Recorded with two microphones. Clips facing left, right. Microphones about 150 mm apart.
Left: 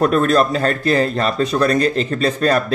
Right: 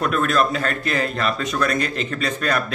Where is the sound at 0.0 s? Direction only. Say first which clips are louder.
Left 5 dB; 35° left (ahead or behind).